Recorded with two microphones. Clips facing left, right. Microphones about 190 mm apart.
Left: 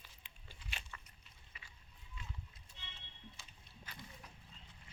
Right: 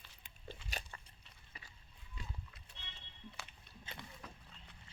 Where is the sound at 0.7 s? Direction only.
35° right (ahead or behind).